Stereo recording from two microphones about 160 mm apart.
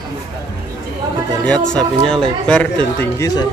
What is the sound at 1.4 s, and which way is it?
Speech, 5° left (ahead or behind).